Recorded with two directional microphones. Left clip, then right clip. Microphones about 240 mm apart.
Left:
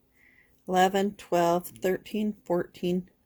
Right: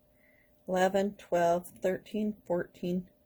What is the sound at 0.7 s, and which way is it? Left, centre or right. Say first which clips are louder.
Speech: left 4 dB; left.